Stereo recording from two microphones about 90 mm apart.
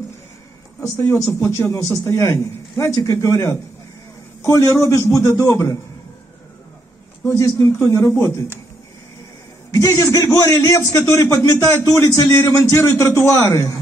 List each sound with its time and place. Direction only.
0.7 s a man's voice: 25° left (ahead or behind)
7.2 s a man's voice: 35° left (ahead or behind)
9.8 s a man's voice: 35° left (ahead or behind)
10.9 s a man's voice: 25° left (ahead or behind)